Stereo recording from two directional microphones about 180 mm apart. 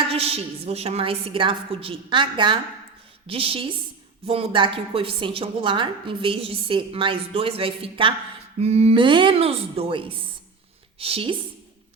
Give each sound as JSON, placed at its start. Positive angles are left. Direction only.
{"t": 0.1, "sound": "a woman's voice", "side_deg": -35}